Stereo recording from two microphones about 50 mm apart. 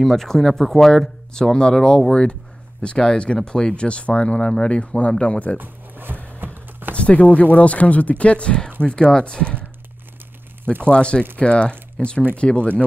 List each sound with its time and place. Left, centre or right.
0.0 s speech: centre; by 5.6 s left
5.6 s zipper: right
6.4 s a sound: right
7.0 s speech: left
10.6 s speech: right
10.9 s speech: left